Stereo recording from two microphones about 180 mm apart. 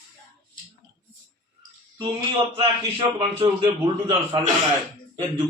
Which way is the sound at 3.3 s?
20° right (ahead or behind).